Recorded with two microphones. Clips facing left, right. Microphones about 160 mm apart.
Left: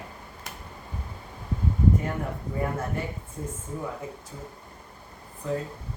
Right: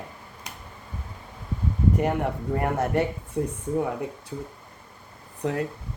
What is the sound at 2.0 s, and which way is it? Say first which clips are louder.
Speech: right 6 dB; 75° right (ahead or behind).